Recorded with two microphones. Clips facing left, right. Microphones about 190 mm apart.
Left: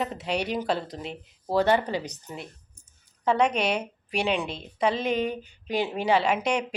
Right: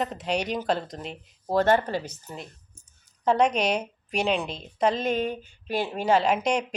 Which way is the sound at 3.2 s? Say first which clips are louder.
Right 1 dB; 40° right (ahead or behind).